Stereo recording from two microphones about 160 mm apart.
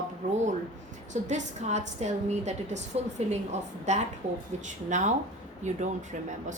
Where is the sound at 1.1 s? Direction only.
50° right (ahead or behind).